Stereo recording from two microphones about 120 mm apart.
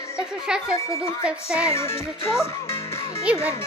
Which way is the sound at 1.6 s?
25° left (ahead or behind).